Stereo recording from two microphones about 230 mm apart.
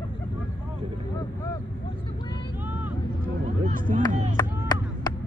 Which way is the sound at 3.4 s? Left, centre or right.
Right.